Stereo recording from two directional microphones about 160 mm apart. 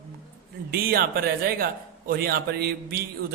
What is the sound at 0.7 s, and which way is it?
A man's voice, 70° right (ahead or behind).